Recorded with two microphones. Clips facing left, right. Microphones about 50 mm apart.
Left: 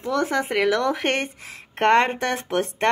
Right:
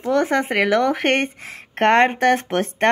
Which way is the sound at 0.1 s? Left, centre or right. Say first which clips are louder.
Right 4 dB; right.